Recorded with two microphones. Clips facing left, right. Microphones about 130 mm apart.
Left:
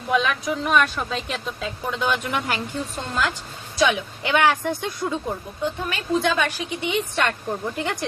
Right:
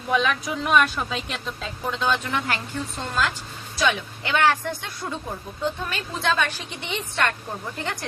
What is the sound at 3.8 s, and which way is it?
Speech, 15° left (ahead or behind).